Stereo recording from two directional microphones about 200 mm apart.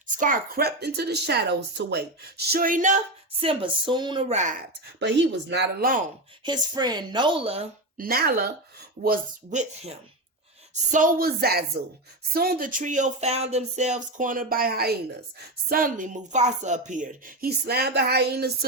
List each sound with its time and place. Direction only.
0.2 s a woman's voice: 45° right (ahead or behind)
3.4 s a woman's voice: 25° right (ahead or behind)
4.9 s speech: 65° right (ahead or behind)
6.4 s a woman's voice: 20° right (ahead or behind)
7.9 s a woman's voice: 50° right (ahead or behind)
10.9 s a woman's voice: 45° right (ahead or behind)